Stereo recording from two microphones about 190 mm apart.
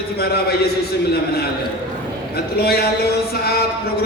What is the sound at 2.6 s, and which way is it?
Speech, 55° left (ahead or behind).